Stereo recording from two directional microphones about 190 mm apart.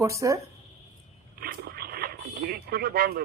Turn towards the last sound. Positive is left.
turn(degrees=-50)  # may be behind; listen again after turning